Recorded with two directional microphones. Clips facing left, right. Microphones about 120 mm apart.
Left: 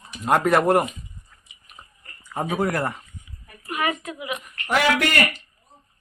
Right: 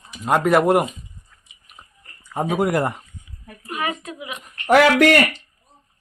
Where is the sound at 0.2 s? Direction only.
Centre (ahead or behind).